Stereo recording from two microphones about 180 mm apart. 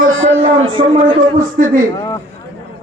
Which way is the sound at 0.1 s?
90° right.